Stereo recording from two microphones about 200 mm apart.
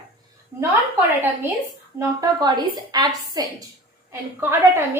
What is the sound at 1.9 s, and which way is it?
A woman's voice, 20° right (ahead or behind).